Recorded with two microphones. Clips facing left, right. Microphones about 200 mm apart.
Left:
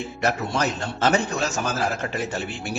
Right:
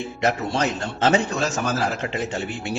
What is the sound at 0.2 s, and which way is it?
Speech, 25° right (ahead or behind).